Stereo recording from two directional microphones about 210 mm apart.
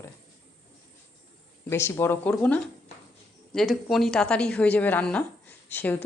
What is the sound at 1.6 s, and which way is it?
A woman's voice, 10° left (ahead or behind).